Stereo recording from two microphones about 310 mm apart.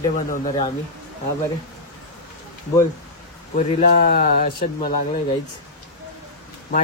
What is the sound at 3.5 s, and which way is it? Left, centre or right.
Speech, left.